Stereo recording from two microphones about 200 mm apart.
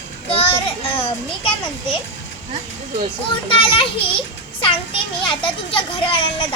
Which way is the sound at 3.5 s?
25° left (ahead or behind).